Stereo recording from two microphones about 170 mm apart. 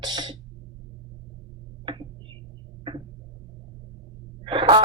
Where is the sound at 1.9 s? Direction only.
25° right (ahead or behind).